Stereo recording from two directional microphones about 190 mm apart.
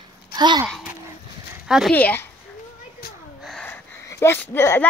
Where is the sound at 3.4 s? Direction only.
5° left (ahead or behind).